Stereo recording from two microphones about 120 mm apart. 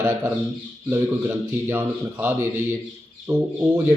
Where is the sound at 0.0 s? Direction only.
10° right (ahead or behind).